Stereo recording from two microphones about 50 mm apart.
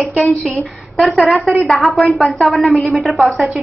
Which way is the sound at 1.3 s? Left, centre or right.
Centre.